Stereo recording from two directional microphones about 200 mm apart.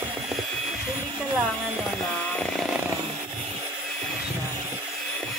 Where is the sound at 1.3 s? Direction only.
Centre (ahead or behind).